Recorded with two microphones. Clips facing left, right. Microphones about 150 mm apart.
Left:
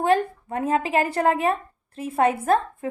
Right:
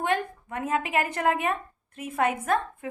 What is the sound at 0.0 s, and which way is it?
A woman's voice, 35° left (ahead or behind).